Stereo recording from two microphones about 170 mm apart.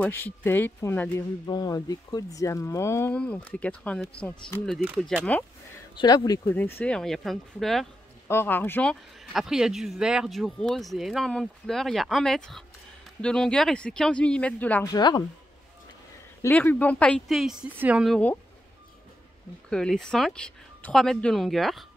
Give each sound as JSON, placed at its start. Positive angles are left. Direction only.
{"t": 0.0, "sound": "speech", "side_deg": 10}
{"t": 1.5, "sound": "speech", "side_deg": 25}
{"t": 5.9, "sound": "speech", "side_deg": 20}
{"t": 6.5, "sound": "speech", "side_deg": 10}
{"t": 8.3, "sound": "speech", "side_deg": 15}
{"t": 9.2, "sound": "speech", "side_deg": 0}
{"t": 14.9, "sound": "speech", "side_deg": 25}
{"t": 16.4, "sound": "speech", "side_deg": 10}
{"t": 19.7, "sound": "speech", "side_deg": 5}